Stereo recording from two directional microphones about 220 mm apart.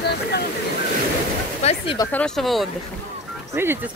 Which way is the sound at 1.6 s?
30° left (ahead or behind).